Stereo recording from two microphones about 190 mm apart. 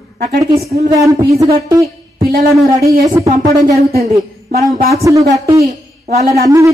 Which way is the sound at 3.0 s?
15° right (ahead or behind).